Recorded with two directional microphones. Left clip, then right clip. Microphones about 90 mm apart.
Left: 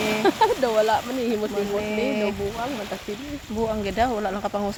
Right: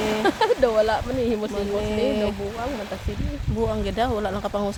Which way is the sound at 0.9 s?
30° right (ahead or behind).